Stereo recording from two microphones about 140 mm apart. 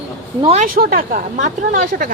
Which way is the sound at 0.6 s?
90° right.